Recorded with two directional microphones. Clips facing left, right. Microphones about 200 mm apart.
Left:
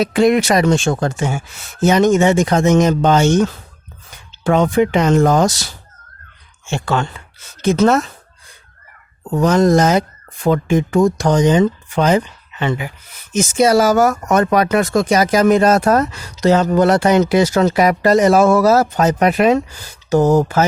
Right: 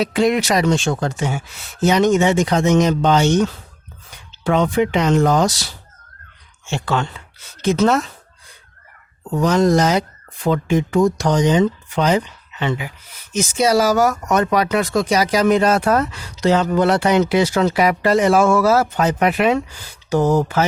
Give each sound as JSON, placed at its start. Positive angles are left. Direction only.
{"t": 0.0, "sound": "speech", "side_deg": 50}
{"t": 9.3, "sound": "speech", "side_deg": 50}